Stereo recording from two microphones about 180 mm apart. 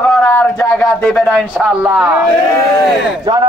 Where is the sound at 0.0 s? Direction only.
10° left (ahead or behind).